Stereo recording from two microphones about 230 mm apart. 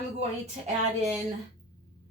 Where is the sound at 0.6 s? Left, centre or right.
Right.